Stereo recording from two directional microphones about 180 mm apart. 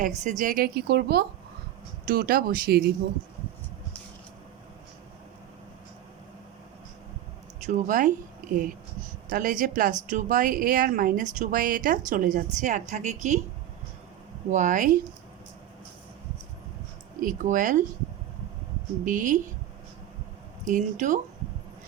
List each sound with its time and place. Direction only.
0.2 s speech: 45° right (ahead or behind); by 2.9 s 60° right (ahead or behind)
7.7 s a woman's voice: 45° right (ahead or behind)
14.5 s speech: 45° right (ahead or behind)
17.2 s speech: 50° right (ahead or behind)
19.0 s speech: 45° right (ahead or behind)
20.7 s speech: 45° right (ahead or behind)